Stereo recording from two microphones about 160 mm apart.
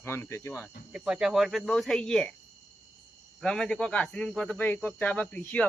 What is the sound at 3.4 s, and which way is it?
Speech, 5° left (ahead or behind).